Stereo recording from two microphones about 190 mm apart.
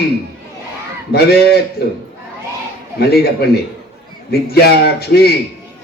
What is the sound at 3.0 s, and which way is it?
Music, 55° left (ahead or behind).